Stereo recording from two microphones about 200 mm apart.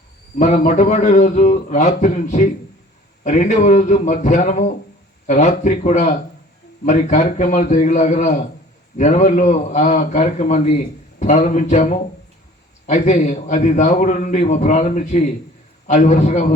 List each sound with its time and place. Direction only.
0.3 s a man's voice: 35° left (ahead or behind)